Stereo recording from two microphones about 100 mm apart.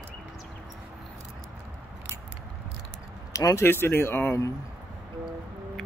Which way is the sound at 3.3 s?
35° left (ahead or behind).